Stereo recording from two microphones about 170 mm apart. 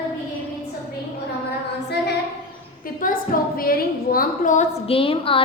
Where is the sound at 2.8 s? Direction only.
55° left (ahead or behind).